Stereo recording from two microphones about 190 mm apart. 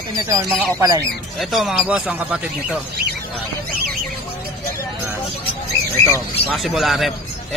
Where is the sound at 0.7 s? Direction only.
15° right (ahead or behind).